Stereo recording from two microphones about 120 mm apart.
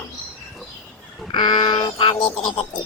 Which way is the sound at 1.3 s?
40° left (ahead or behind).